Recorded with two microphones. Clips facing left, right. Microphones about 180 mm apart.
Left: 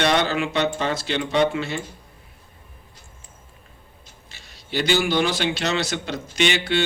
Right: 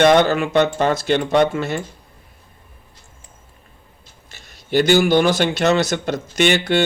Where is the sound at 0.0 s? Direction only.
50° right (ahead or behind).